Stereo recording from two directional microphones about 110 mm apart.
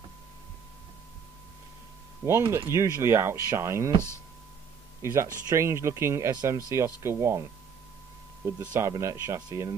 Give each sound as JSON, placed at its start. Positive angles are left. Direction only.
{"t": 2.2, "sound": "speech", "side_deg": -25}
{"t": 5.0, "sound": "speech", "side_deg": -25}
{"t": 8.5, "sound": "speech", "side_deg": -25}